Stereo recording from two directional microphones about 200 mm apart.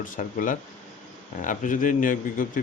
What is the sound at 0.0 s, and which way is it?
Speech, 40° left (ahead or behind).